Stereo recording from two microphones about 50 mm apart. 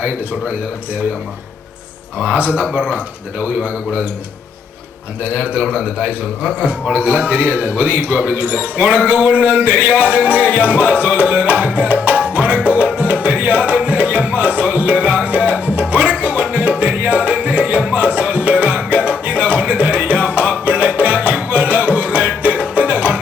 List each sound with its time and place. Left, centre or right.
2.2 s a man's voice: right
5.2 s a man's voice: right
12.1 s music: right